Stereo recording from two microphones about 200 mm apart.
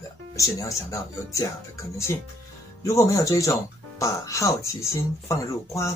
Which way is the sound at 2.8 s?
15° left (ahead or behind).